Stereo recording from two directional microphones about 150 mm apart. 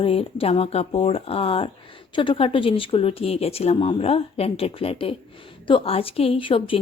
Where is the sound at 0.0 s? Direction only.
35° left (ahead or behind).